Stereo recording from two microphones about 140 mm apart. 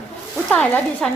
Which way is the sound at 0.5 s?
5° left (ahead or behind).